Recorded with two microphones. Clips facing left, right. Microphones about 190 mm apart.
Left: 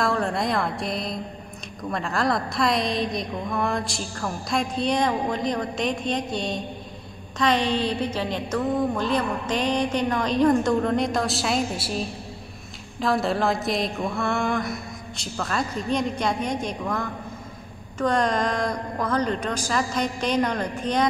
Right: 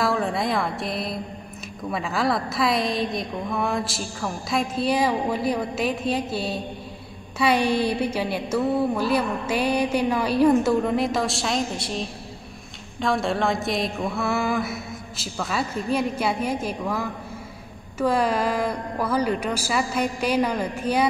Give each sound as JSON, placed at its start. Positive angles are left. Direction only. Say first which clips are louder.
{"t": 0.0, "sound": "a woman's voice", "louder": "right 1 dB", "side_deg": 0}